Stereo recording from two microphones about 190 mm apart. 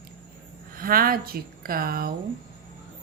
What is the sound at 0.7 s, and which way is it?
Speech, 50° right (ahead or behind).